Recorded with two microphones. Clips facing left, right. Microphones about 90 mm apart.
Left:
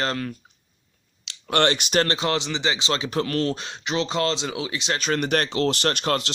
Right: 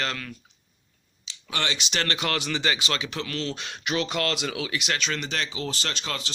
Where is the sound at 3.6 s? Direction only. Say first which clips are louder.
Left 2 dB; 25° left (ahead or behind).